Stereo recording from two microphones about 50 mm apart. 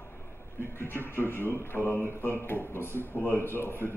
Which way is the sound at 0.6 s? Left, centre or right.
Left.